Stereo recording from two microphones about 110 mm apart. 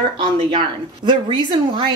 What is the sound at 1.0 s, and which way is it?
Speech, 45° right (ahead or behind).